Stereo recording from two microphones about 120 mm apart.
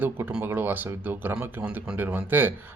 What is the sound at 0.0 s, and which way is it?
Speech, 15° right (ahead or behind).